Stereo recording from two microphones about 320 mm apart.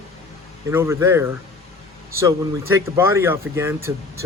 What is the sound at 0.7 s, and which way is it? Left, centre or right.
Speech, centre.